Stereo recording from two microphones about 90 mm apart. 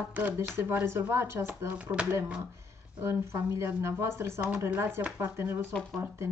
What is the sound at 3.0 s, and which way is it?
A woman's voice, 30° right (ahead or behind).